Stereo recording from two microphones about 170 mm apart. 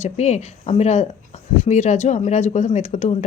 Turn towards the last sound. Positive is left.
turn(degrees=40)  # may be behind; listen again after turning